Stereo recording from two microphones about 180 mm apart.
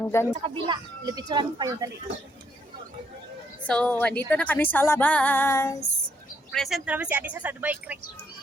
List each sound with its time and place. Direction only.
0.0 s speech: 15° left (ahead or behind)
0.4 s speech: 25° right (ahead or behind)
3.7 s female singing: 5° left (ahead or behind)
6.5 s speech: centre (ahead or behind)